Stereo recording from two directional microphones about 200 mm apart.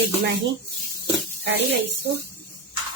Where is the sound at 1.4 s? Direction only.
60° right (ahead or behind).